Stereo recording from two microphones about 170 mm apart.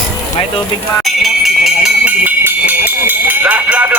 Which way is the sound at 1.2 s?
Centre (ahead or behind).